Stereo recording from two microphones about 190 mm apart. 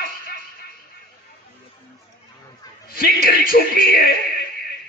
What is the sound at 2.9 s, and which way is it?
Speech, 55° left (ahead or behind).